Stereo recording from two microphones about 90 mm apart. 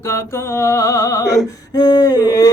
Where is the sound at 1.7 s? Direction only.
50° left (ahead or behind).